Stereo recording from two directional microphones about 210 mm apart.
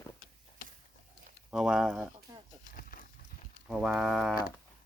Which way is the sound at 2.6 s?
40° left (ahead or behind).